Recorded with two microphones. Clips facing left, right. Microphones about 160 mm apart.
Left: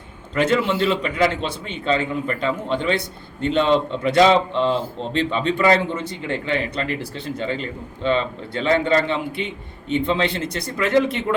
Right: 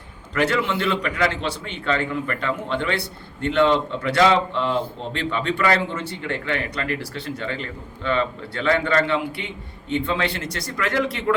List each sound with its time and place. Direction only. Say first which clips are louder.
0.3 s a man's voice: left 3 dB; 20° left (ahead or behind)